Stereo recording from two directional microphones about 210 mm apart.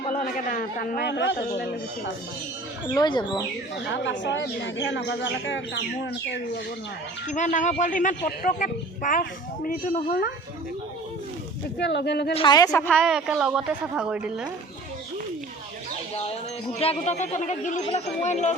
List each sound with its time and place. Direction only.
0.0 s a man's voice: 35° left (ahead or behind)
2.8 s speech: 20° left (ahead or behind)
3.8 s speech: 60° left (ahead or behind)
7.3 s a man's voice: 35° left (ahead or behind)
11.8 s a man's voice: 55° left (ahead or behind)
12.3 s a woman's voice: 25° left (ahead or behind); by 14.5 s 5° right (ahead or behind)
16.7 s a man's voice: 30° left (ahead or behind)